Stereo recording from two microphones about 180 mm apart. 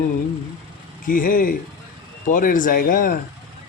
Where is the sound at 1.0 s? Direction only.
50° left (ahead or behind).